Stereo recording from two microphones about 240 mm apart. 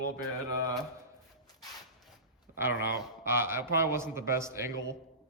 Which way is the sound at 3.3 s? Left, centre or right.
Centre.